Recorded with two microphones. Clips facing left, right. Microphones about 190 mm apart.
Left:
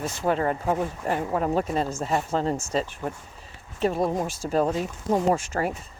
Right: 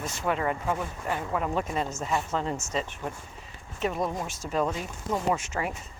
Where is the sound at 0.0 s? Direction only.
35° left (ahead or behind).